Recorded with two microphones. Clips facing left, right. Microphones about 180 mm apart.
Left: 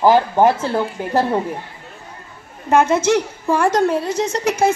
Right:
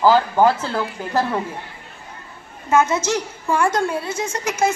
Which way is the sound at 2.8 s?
55° left (ahead or behind).